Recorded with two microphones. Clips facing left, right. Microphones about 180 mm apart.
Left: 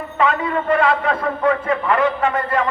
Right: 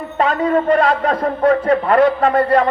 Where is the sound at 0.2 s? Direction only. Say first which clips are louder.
Right 4 dB; 35° right (ahead or behind).